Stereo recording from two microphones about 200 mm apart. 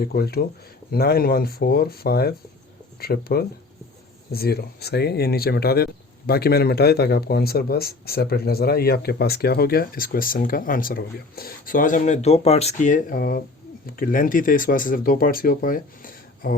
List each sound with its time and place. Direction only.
0.0 s speech: 50° left (ahead or behind)